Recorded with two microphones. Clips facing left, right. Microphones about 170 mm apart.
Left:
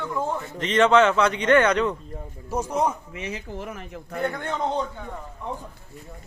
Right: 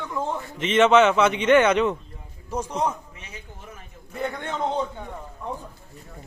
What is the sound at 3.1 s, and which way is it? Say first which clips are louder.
Speech: left 11 dB; 90° left.